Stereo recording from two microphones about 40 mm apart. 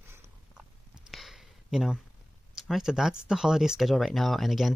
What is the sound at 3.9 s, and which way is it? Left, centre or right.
Speech, centre.